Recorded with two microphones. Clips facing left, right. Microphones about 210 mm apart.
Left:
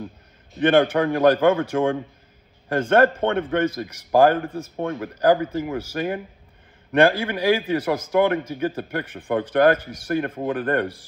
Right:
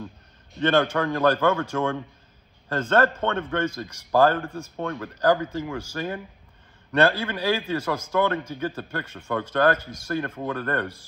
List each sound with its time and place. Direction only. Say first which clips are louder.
0.6 s a man's voice: left 4 dB; 15° left (ahead or behind)
4.5 s a man's voice: left 4 dB; 10° right (ahead or behind)
4.7 s a man's voice: left 3 dB; 15° left (ahead or behind)